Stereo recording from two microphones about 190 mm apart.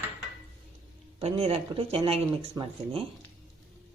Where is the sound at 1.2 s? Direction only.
30° right (ahead or behind).